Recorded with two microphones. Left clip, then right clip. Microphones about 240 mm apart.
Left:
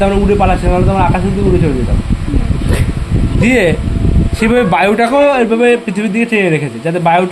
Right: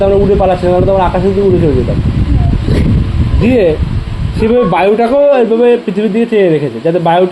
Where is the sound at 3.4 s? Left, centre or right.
Left.